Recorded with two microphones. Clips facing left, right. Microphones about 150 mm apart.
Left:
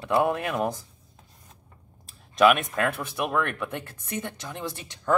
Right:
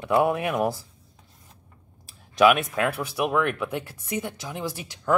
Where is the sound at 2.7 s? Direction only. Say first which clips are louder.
Right 2 dB; 5° right (ahead or behind).